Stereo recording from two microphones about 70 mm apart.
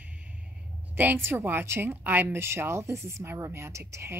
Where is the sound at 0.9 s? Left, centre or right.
Right.